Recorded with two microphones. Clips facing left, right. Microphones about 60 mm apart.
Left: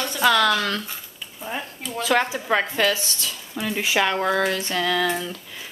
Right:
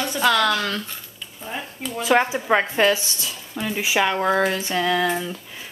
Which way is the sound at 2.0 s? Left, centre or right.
Centre.